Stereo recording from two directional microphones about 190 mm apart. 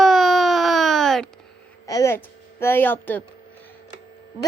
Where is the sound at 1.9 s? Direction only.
15° left (ahead or behind).